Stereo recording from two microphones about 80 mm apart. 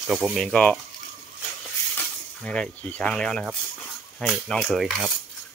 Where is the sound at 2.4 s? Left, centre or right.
Centre.